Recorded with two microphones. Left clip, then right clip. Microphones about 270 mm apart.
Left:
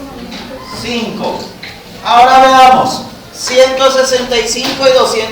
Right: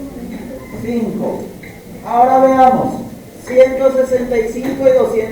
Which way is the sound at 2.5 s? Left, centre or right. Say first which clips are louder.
Left 5 dB; left.